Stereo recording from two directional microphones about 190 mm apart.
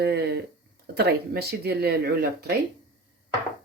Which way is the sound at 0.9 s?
55° right (ahead or behind).